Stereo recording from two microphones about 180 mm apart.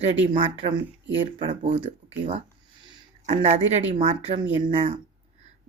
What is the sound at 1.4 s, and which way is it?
Speech, 30° right (ahead or behind).